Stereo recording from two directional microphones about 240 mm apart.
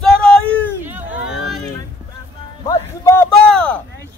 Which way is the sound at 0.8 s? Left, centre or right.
Centre.